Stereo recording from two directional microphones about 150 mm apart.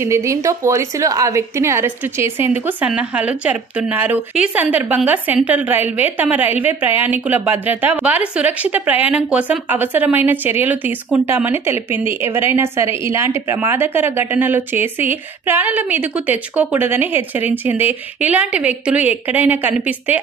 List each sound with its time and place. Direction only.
0.0 s a woman's voice: 20° right (ahead or behind)